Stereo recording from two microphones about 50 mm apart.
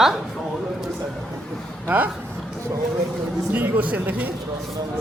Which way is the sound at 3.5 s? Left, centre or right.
Right.